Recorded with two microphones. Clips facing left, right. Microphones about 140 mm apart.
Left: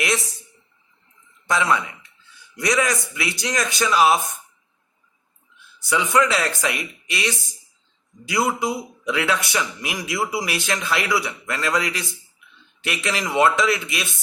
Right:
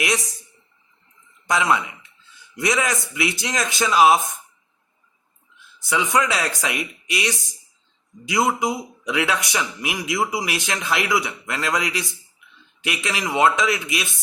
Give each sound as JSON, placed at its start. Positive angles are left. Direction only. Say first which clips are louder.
{"t": 1.5, "sound": "a man's voice", "louder": "right 1 dB", "side_deg": -20}
{"t": 5.8, "sound": "a man's voice", "louder": "left 2 dB", "side_deg": -20}
{"t": 13.1, "sound": "a man's voice", "louder": "left 2 dB", "side_deg": -5}
{"t": 13.3, "sound": "speech", "louder": "even", "side_deg": -20}